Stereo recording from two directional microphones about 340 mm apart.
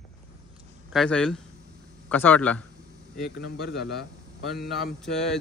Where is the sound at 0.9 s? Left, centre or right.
Centre.